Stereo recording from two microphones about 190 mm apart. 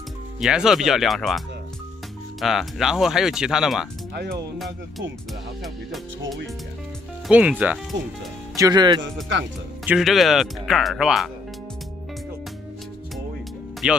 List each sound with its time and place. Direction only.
0.4 s speech: 5° right (ahead or behind)
2.4 s speech: centre (ahead or behind)
4.1 s speech: 55° right (ahead or behind)
7.2 s speech: 5° right (ahead or behind)
8.5 s speech: 20° right (ahead or behind)
9.8 s speech: centre (ahead or behind)
13.8 s speech: 5° right (ahead or behind)